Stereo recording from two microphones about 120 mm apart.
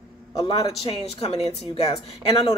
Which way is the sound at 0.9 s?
55° left (ahead or behind).